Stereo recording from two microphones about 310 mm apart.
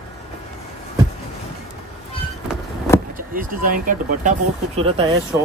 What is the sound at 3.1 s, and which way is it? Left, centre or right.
Speech, right.